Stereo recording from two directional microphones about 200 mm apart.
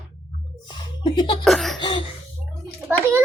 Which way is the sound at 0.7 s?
25° left (ahead or behind).